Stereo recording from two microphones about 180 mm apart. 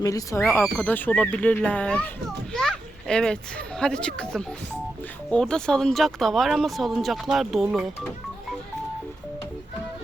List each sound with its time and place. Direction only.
0.0 s a child's voice: 20° left (ahead or behind); by 8.1 s centre (ahead or behind)